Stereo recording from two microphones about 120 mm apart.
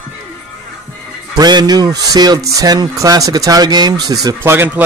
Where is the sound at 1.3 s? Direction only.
35° right (ahead or behind).